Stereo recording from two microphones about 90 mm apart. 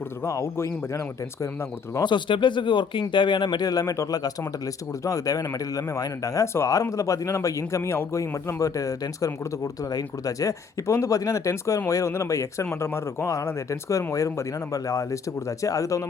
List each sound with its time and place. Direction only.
0.3 s speech: 35° left (ahead or behind)
2.0 s speech: 60° left (ahead or behind); by 16.0 s 35° left (ahead or behind)